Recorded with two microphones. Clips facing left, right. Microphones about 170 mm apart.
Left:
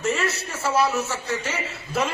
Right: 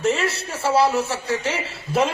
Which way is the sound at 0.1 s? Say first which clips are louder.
Right 2 dB; 30° right (ahead or behind).